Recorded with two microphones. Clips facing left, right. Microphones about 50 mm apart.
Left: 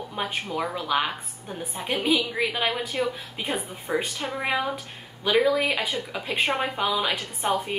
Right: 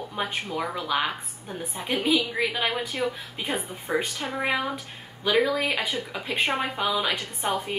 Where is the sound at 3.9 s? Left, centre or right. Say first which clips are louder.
Even; centre.